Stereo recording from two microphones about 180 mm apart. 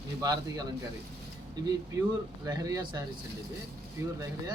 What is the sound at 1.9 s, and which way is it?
Speech, 20° right (ahead or behind).